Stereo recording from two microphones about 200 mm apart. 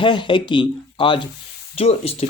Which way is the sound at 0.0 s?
25° left (ahead or behind).